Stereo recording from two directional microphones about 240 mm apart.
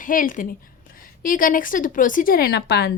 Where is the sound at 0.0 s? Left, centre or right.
Left.